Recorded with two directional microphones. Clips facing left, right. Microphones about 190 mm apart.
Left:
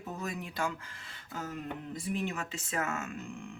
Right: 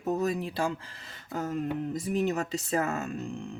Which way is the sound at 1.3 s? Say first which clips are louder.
Right 8 dB; 45° right (ahead or behind).